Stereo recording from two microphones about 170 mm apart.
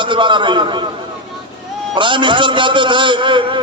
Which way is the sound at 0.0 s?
30° right (ahead or behind).